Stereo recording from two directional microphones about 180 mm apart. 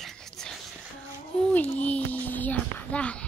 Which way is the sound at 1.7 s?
10° left (ahead or behind).